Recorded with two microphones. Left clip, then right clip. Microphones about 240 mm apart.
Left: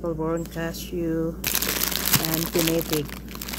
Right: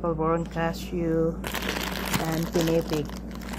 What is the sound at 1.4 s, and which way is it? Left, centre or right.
Crumpling, left.